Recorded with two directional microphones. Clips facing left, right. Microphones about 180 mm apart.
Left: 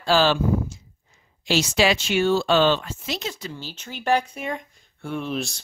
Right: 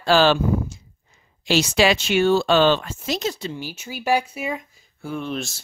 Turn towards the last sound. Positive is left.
turn(degrees=0)  # may be behind; listen again after turning